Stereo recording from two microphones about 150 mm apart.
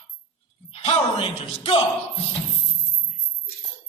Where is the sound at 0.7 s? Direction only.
45° left (ahead or behind).